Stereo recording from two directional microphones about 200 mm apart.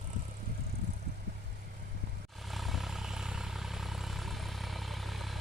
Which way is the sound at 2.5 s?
Centre (ahead or behind).